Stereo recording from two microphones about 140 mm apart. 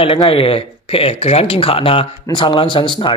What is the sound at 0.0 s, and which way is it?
A man's voice, 40° left (ahead or behind).